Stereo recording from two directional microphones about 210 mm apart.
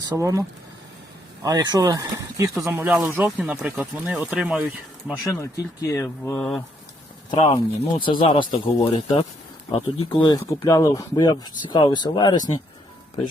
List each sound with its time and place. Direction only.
0.2 s speech: 15° right (ahead or behind)
5.3 s speech: 15° left (ahead or behind)
7.3 s speech: 30° left (ahead or behind)